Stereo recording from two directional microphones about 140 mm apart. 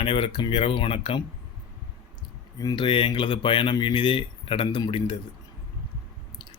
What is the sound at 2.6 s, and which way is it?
Speech, 30° left (ahead or behind).